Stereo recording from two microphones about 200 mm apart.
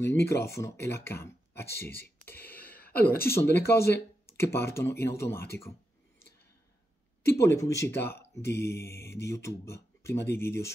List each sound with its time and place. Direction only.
0.0 s speech: 15° left (ahead or behind)
7.3 s speech: 15° left (ahead or behind)